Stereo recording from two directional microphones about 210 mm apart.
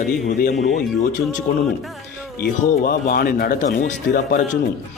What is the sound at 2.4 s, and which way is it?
Speech, 45° left (ahead or behind).